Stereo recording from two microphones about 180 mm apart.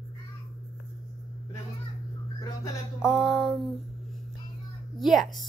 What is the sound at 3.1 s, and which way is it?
Speech, centre (ahead or behind).